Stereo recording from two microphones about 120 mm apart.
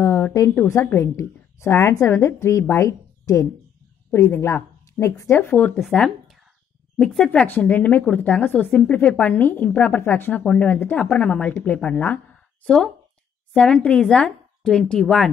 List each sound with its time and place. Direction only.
0.0 s a woman's voice: 25° left (ahead or behind)
5.8 s speech: 5° left (ahead or behind)
7.2 s speech: 15° left (ahead or behind)
12.6 s speech: 5° left (ahead or behind)